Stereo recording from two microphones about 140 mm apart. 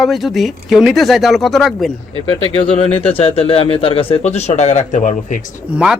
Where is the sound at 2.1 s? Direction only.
40° right (ahead or behind).